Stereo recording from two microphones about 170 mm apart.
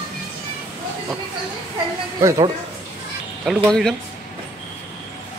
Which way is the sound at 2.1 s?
20° right (ahead or behind).